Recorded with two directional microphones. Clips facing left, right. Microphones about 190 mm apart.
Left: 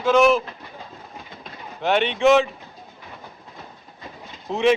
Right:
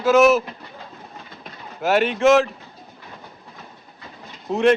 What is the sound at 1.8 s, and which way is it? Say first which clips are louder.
Speech: right 1 dB; 5° right (ahead or behind).